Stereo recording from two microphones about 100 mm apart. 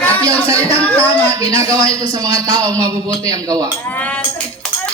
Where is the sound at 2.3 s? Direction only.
30° right (ahead or behind).